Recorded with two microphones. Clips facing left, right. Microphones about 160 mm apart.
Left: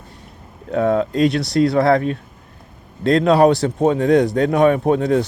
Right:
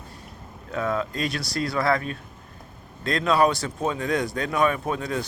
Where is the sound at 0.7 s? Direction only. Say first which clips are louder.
Left 9 dB; 40° left (ahead or behind).